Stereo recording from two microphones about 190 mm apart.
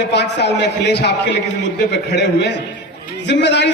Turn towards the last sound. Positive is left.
turn(degrees=65)  # may be behind; listen again after turning